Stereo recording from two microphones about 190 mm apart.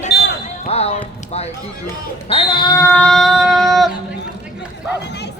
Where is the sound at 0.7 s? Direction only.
35° left (ahead or behind).